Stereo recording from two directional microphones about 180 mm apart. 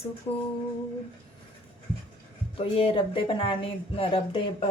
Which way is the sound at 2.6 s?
30° left (ahead or behind).